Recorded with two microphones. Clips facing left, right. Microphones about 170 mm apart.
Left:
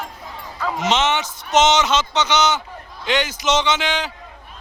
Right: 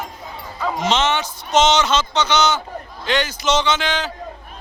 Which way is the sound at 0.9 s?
20° left (ahead or behind).